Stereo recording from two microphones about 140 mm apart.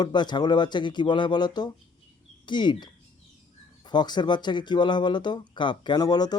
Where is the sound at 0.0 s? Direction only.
30° left (ahead or behind).